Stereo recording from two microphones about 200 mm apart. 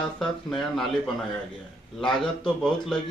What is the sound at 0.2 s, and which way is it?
A man's voice, centre (ahead or behind).